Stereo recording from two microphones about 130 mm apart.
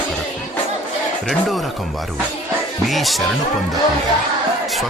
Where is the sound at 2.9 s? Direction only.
Centre (ahead or behind).